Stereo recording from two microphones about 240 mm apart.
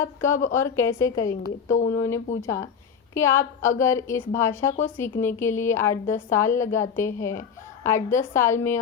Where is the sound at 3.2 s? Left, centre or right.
Centre.